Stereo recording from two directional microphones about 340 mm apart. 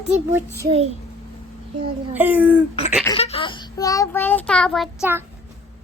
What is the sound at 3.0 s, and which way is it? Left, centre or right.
A child's voice, centre.